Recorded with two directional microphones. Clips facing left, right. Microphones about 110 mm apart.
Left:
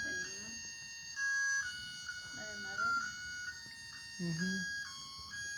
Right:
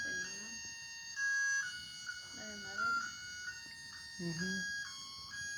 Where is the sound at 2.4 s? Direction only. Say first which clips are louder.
Left 2 dB; 20° left (ahead or behind).